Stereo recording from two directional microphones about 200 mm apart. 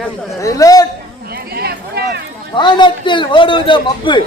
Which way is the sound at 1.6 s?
55° right (ahead or behind).